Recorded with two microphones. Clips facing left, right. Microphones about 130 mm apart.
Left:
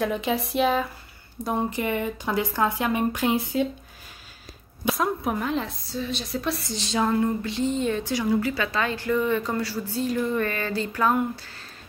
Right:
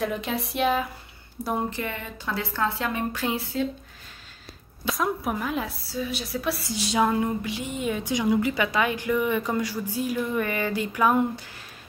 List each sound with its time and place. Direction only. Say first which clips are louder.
0.0 s speech: left 3 dB; centre (ahead or behind)
1.7 s a woman's voice: left 6 dB; 15° left (ahead or behind)
4.9 s a woman's voice: right 1 dB; centre (ahead or behind)